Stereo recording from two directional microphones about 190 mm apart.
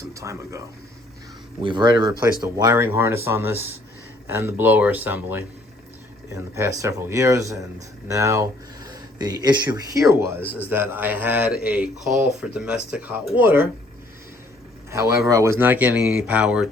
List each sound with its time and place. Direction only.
0.0 s speech: 15° right (ahead or behind)
1.6 s speech: 25° right (ahead or behind)
15.3 s speech: 15° right (ahead or behind)